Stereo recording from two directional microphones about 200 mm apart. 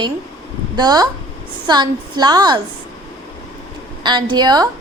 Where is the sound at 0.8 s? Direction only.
20° right (ahead or behind).